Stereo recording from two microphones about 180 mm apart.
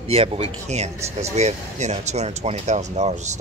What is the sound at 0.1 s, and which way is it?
Speech, 35° right (ahead or behind).